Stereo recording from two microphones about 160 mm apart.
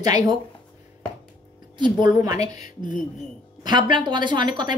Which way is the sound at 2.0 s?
20° right (ahead or behind).